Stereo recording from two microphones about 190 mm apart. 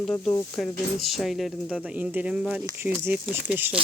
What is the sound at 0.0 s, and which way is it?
Speech, 10° left (ahead or behind).